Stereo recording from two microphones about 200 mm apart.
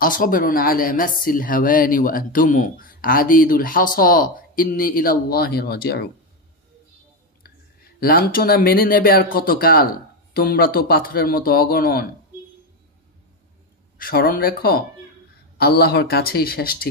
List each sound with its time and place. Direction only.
0.0 s speech: 45° left (ahead or behind)
8.0 s speech: 50° left (ahead or behind)
13.9 s speech: 45° left (ahead or behind)